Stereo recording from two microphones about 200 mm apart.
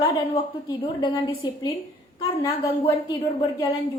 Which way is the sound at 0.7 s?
20° left (ahead or behind).